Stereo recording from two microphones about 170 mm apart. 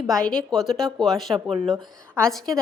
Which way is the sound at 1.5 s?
30° right (ahead or behind).